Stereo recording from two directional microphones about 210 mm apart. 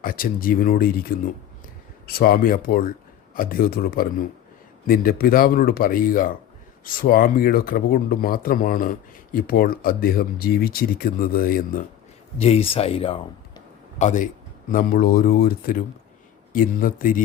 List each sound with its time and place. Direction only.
0.0 s speech: 40° left (ahead or behind)
12.4 s speech: 30° left (ahead or behind)